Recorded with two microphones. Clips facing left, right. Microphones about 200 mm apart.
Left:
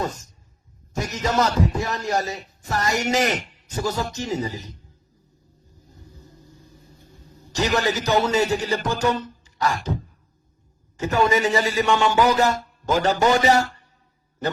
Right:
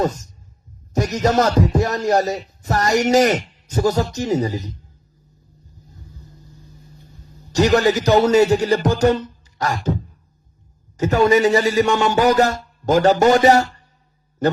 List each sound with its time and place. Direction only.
1.1 s speech: 45° right (ahead or behind)
7.5 s speech: 40° right (ahead or behind)
11.0 s speech: 40° right (ahead or behind)